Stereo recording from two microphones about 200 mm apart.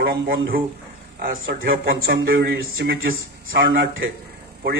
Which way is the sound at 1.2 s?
45° right (ahead or behind).